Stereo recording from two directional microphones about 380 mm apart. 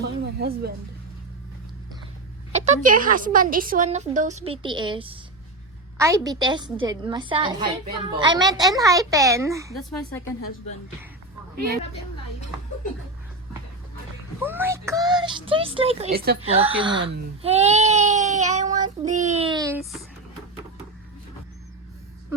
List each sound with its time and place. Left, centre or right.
0.0 s speech: right
2.5 s a woman's voice: centre
14.4 s a woman's voice: centre; by 16.6 s right
16.6 s a woman's voice: centre